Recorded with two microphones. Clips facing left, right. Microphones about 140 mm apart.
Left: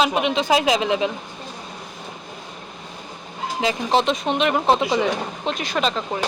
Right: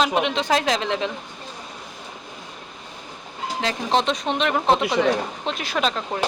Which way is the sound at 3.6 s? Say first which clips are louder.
Left 2 dB; 5° left (ahead or behind).